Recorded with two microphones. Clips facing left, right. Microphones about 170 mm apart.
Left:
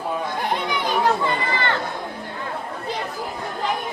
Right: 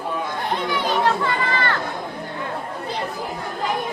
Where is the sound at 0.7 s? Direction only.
20° left (ahead or behind).